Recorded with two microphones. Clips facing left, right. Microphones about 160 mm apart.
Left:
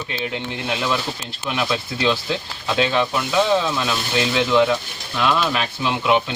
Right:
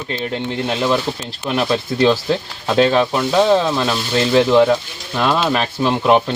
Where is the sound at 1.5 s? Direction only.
40° right (ahead or behind).